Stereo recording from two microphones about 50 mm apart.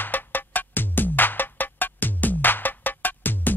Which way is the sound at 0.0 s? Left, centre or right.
Left.